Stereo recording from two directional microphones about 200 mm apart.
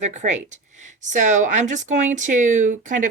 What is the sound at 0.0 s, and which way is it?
Speech, 35° right (ahead or behind).